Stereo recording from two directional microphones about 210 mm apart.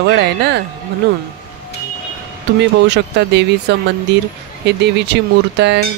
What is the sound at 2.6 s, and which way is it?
Speech, 55° right (ahead or behind).